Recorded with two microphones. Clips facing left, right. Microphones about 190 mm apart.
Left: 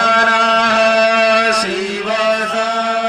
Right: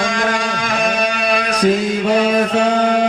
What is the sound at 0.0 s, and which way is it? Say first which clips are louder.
Music: left 3 dB; 65° left (ahead or behind).